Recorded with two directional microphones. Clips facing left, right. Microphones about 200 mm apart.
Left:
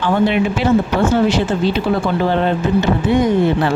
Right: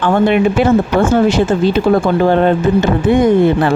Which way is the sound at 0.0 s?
50° right (ahead or behind).